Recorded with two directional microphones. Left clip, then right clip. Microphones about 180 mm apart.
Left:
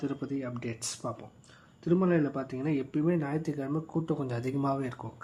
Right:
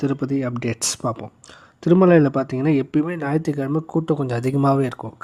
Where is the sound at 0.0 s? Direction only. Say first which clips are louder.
Right 12 dB; 90° right.